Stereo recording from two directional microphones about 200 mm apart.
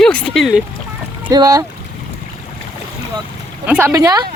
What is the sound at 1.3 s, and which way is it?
Speech, 20° right (ahead or behind).